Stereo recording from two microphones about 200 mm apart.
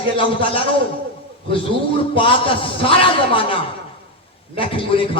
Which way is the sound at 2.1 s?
25° left (ahead or behind).